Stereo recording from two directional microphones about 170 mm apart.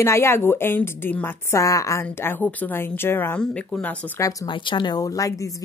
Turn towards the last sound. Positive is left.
turn(degrees=20)  # may be behind; listen again after turning